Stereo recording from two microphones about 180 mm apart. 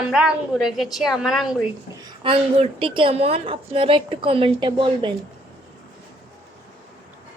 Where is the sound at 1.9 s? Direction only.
20° right (ahead or behind).